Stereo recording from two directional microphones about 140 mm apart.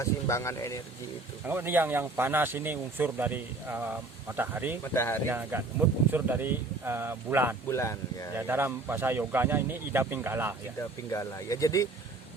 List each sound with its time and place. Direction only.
0.0 s speech: 20° left (ahead or behind)
1.5 s speech: 15° right (ahead or behind)
4.8 s speech: 15° left (ahead or behind)
5.3 s speech: 15° right (ahead or behind)
7.7 s speech: 20° left (ahead or behind)
8.4 s speech: 15° right (ahead or behind)
10.8 s speech: 20° left (ahead or behind)